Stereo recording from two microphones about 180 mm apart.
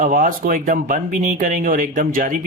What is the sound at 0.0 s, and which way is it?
Speech, 50° right (ahead or behind).